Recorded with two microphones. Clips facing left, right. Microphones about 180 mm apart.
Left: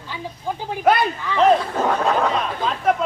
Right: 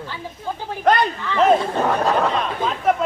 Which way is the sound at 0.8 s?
5° left (ahead or behind).